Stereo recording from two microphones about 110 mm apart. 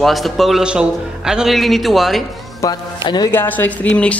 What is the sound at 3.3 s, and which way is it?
Speech, 20° left (ahead or behind).